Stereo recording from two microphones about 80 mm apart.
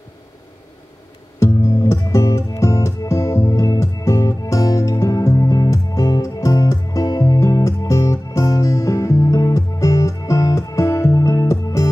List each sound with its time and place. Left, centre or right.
1.4 s music: left